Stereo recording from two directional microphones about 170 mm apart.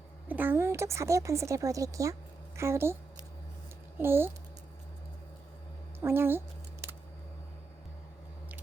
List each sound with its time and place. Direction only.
0.3 s a woman's voice: 10° right (ahead or behind)
6.0 s a woman's voice: 15° right (ahead or behind)